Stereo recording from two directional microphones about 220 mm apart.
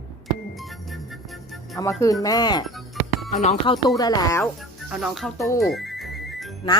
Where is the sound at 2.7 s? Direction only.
Centre (ahead or behind).